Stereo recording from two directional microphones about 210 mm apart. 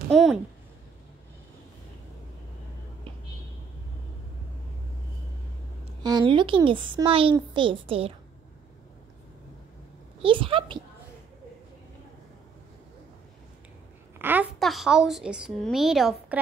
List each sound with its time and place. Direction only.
0.1 s a sound: centre (ahead or behind)
6.0 s speech: 20° right (ahead or behind)
10.2 s speech: 25° right (ahead or behind)
14.1 s a woman's voice: 10° right (ahead or behind)